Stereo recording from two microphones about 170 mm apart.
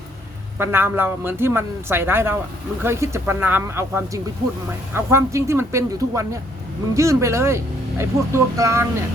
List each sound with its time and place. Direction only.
0.6 s speech: 15° right (ahead or behind)